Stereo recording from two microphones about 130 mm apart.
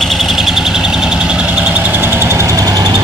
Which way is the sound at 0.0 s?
Centre (ahead or behind).